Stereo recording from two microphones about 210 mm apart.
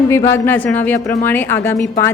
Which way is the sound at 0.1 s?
10° left (ahead or behind).